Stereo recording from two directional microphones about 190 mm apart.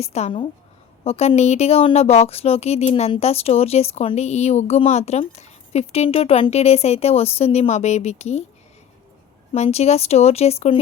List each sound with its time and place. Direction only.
0.0 s a woman's voice: 35° left (ahead or behind)
9.5 s a woman's voice: 30° left (ahead or behind)